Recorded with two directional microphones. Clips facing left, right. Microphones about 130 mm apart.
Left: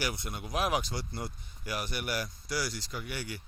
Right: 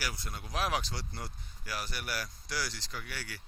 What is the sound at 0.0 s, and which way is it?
A man's voice, 20° left (ahead or behind).